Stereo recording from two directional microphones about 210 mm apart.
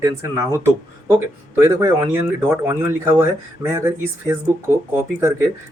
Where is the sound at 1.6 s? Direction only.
15° right (ahead or behind).